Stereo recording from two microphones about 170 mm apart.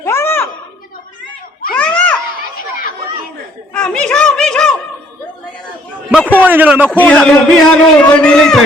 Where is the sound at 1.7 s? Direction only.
10° left (ahead or behind).